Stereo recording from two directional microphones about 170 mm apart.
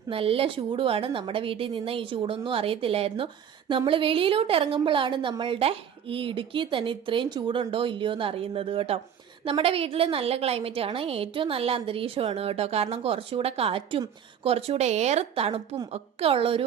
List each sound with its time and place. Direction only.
0.1 s a woman's voice: 35° right (ahead or behind)